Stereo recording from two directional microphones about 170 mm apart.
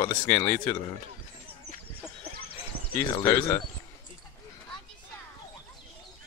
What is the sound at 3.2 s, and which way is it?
Speech, 15° left (ahead or behind).